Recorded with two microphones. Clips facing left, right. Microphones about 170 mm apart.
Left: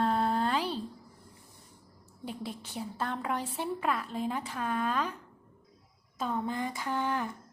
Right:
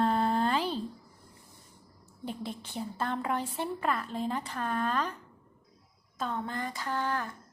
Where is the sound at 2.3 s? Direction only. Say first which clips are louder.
Right 1 dB; 5° left (ahead or behind).